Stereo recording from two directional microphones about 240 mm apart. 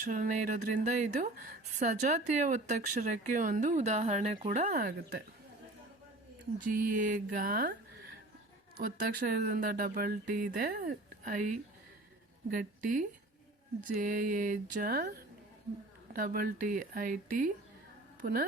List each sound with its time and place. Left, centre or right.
0.0 s speech: right
6.7 s speech: right
8.8 s speech: right
16.1 s a woman's voice: right